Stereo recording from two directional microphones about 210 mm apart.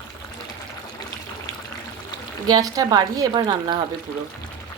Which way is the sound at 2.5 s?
15° right (ahead or behind).